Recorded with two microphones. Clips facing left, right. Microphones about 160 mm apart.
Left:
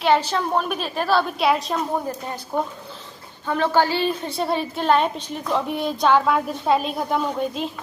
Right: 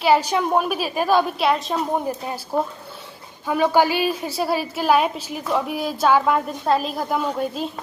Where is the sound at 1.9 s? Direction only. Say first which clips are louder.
Right 2 dB; 10° right (ahead or behind).